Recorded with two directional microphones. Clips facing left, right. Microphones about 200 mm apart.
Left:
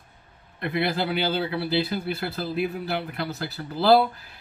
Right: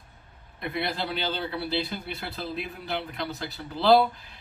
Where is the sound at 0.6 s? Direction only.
Centre (ahead or behind).